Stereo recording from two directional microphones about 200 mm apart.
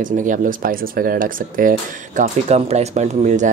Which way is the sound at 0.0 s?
40° right (ahead or behind).